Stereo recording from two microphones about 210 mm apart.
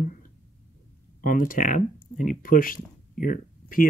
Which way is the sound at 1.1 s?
40° left (ahead or behind).